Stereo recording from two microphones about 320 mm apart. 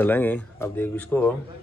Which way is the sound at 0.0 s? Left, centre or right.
Centre.